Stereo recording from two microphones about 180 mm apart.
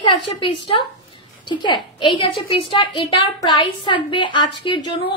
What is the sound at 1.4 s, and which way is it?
A woman's voice, 25° left (ahead or behind).